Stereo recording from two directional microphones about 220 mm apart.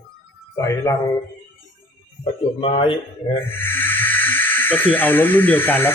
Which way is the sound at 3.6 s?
10° left (ahead or behind).